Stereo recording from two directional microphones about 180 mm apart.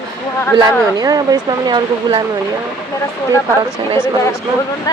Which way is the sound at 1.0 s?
20° right (ahead or behind).